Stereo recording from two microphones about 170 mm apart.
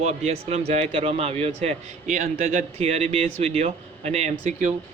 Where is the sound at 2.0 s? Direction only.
55° right (ahead or behind).